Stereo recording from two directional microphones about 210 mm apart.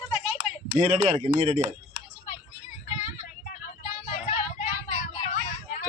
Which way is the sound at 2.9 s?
30° left (ahead or behind).